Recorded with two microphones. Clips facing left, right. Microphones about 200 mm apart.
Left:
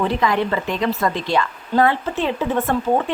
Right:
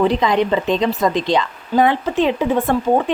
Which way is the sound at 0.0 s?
20° right (ahead or behind).